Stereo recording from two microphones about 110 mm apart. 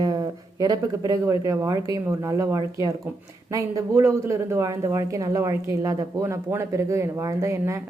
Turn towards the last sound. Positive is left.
turn(degrees=-25)  # may be behind; listen again after turning